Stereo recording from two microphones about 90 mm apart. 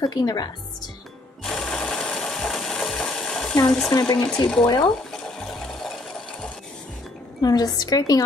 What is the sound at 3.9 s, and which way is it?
Speech, 50° left (ahead or behind).